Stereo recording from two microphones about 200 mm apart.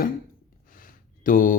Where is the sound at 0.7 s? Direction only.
45° left (ahead or behind).